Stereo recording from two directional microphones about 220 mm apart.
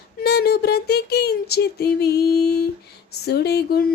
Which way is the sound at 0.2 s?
45° left (ahead or behind).